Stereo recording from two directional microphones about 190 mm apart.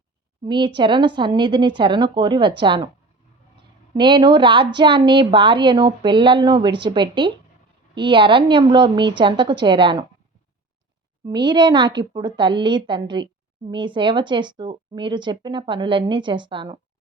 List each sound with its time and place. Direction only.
0.4 s a woman's voice: 25° right (ahead or behind)
3.9 s a woman's voice: 25° right (ahead or behind)
11.3 s a woman's voice: 25° right (ahead or behind)